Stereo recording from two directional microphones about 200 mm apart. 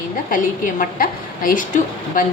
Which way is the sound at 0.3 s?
45° left (ahead or behind).